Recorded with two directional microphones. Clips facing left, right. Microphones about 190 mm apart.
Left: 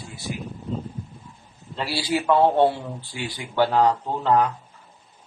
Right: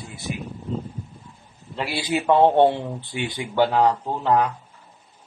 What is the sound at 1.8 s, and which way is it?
Speech, 20° right (ahead or behind).